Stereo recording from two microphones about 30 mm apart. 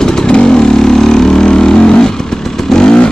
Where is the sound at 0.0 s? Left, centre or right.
Left.